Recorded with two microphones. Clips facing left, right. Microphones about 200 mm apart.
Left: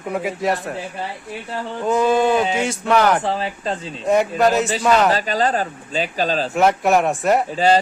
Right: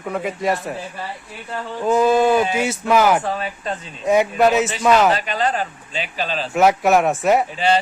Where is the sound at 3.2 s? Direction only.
30° left (ahead or behind).